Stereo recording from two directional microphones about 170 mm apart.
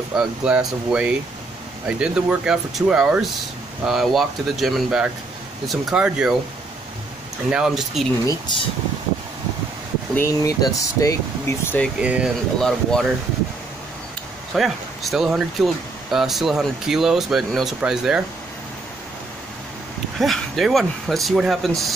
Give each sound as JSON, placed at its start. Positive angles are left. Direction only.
{"t": 0.1, "sound": "speech", "side_deg": -5}
{"t": 7.4, "sound": "speech", "side_deg": -5}
{"t": 10.1, "sound": "speech", "side_deg": 20}
{"t": 12.0, "sound": "speech", "side_deg": -5}
{"t": 14.5, "sound": "speech", "side_deg": 0}
{"t": 20.2, "sound": "speech", "side_deg": 0}